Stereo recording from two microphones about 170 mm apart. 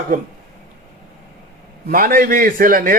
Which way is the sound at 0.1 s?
50° right (ahead or behind).